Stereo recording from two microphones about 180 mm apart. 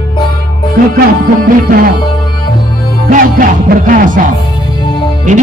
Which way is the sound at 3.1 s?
50° right (ahead or behind).